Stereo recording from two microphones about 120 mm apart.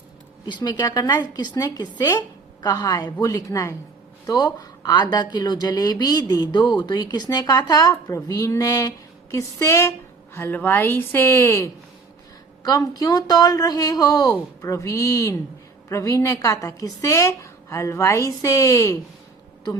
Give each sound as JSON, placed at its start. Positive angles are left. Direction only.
{"t": 0.4, "sound": "a woman's voice", "side_deg": 35}
{"t": 12.6, "sound": "a woman's voice", "side_deg": 30}